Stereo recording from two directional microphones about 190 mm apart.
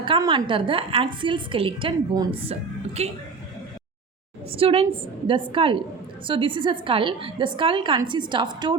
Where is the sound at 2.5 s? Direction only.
35° right (ahead or behind).